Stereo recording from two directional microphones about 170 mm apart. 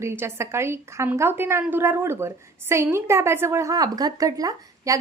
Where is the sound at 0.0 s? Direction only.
15° right (ahead or behind).